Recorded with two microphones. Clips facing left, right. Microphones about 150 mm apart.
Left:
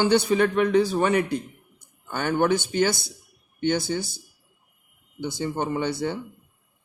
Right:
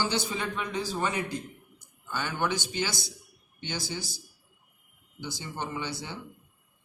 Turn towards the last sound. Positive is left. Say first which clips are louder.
# left 10 dB
turn(degrees=55)  # may be behind; listen again after turning